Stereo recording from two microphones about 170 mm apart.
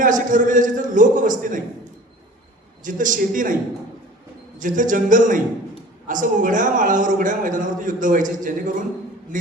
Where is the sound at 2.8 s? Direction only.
50° right (ahead or behind).